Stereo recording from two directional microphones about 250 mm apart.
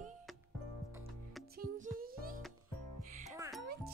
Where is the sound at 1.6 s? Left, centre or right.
Right.